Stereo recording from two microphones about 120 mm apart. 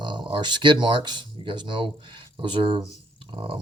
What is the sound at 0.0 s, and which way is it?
Speech, 40° right (ahead or behind).